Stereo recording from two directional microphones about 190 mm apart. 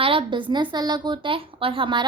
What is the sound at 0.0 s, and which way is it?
A woman's voice, 25° right (ahead or behind).